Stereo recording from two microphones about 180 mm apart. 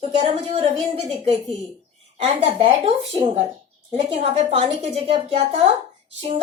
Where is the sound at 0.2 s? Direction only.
30° right (ahead or behind).